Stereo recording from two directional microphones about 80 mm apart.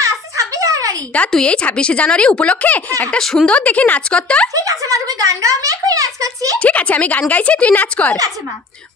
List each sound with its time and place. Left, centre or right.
0.0 s a sound: right
1.3 s a woman's voice: centre
3.1 s a woman's voice: centre
3.5 s a woman's voice: centre
4.6 s speech: right
6.6 s a woman's voice: centre